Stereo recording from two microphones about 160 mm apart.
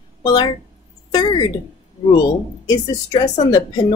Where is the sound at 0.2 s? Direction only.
25° left (ahead or behind).